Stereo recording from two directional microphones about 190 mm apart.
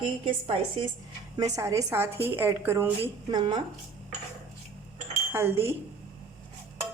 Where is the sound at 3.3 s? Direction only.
25° right (ahead or behind).